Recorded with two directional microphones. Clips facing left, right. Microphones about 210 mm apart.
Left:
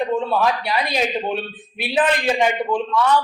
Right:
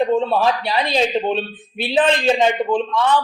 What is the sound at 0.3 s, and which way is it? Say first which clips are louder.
A man's voice: right 2 dB; 30° right (ahead or behind).